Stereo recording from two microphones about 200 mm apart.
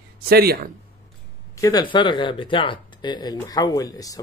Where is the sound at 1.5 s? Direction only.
20° left (ahead or behind).